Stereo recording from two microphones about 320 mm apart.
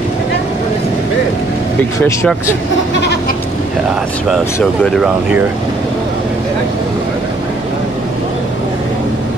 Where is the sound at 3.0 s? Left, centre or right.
Left.